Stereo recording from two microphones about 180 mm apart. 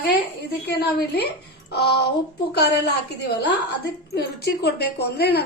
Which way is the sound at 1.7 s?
65° left (ahead or behind).